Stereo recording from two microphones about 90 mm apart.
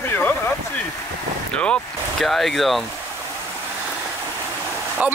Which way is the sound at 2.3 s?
Centre (ahead or behind).